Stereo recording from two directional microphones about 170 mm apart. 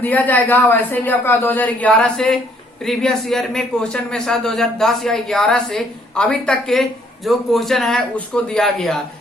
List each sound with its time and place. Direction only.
0.0 s a man's voice: 10° left (ahead or behind)